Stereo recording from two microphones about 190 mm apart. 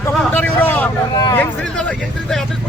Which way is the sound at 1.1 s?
20° left (ahead or behind).